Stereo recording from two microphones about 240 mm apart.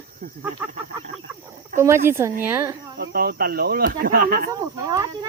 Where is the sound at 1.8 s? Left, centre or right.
Centre.